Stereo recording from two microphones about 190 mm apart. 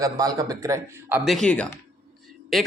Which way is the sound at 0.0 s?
20° right (ahead or behind).